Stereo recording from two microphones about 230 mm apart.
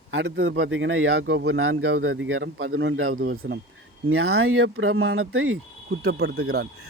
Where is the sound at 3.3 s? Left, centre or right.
Right.